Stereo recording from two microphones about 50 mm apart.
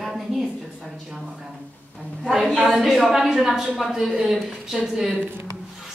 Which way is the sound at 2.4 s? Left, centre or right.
Centre.